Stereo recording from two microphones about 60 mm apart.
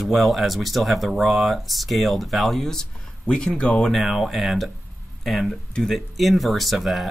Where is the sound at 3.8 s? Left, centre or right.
Centre.